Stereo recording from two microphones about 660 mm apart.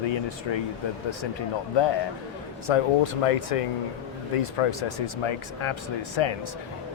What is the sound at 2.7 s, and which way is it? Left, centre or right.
Speech, left.